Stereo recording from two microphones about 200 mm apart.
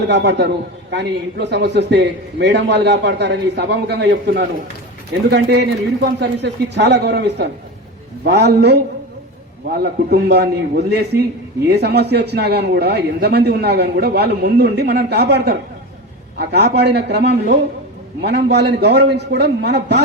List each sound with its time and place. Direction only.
0.1 s a man's voice: 60° right (ahead or behind)